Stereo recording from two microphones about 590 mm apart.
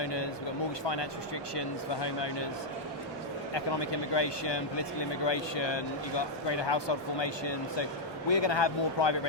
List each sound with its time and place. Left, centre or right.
0.0 s a sound: left
1.5 s speech: left
3.5 s speech: left